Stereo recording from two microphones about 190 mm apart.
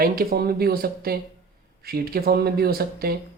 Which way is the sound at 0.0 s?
50° right (ahead or behind).